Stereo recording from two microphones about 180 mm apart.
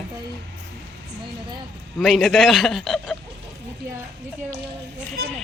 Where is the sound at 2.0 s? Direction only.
Centre (ahead or behind).